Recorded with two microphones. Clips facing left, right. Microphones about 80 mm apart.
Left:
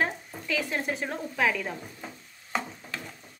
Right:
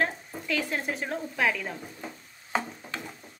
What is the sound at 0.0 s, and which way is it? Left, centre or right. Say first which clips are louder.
Speech: even; centre.